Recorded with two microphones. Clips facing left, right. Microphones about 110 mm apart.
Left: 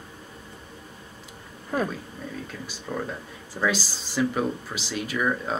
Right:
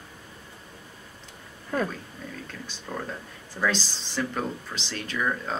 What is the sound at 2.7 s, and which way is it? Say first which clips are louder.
Speech: left 3 dB; 5° left (ahead or behind).